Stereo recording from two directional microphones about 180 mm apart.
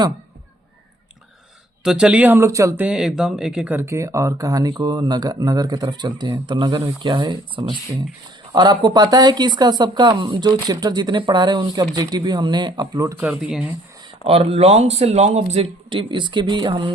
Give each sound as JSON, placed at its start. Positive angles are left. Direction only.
{"t": 1.8, "sound": "speech", "side_deg": -5}
{"t": 13.4, "sound": "speech", "side_deg": -5}
{"t": 14.3, "sound": "a man's voice", "side_deg": -35}